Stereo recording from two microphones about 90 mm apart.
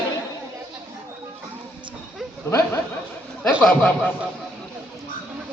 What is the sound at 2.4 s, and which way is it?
Speech, 30° left (ahead or behind).